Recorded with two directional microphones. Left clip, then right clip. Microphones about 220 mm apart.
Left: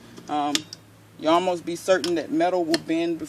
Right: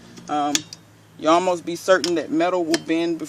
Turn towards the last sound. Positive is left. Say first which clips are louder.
# right 3 dB
turn(degrees=-15)  # may be behind; listen again after turning